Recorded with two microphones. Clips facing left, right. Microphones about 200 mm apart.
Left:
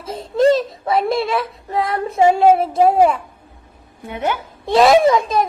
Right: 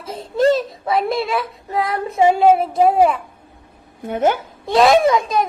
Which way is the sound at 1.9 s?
30° left (ahead or behind).